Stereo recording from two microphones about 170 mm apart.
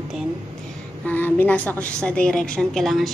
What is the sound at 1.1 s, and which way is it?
A woman's voice, 10° left (ahead or behind).